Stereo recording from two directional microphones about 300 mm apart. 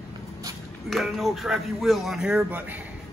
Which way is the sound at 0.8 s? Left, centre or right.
Centre.